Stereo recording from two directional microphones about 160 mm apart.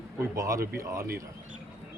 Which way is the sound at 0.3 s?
20° right (ahead or behind).